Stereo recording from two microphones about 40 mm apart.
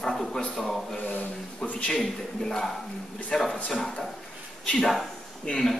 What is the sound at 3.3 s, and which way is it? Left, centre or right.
Speech, left.